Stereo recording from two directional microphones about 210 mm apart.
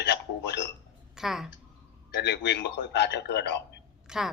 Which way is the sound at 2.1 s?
55° left (ahead or behind).